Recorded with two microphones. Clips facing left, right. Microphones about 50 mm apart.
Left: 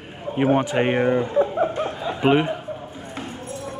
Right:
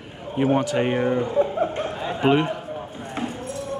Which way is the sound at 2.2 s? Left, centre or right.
Centre.